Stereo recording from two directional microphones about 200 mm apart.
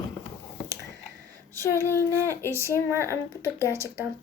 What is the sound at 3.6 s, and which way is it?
Child singing, 15° left (ahead or behind).